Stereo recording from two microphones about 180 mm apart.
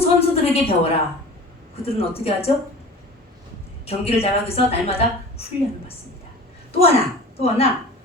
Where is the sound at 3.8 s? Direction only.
35° left (ahead or behind).